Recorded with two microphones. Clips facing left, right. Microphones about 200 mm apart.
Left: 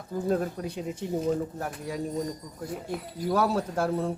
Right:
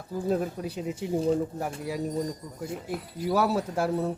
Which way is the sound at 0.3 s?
5° right (ahead or behind).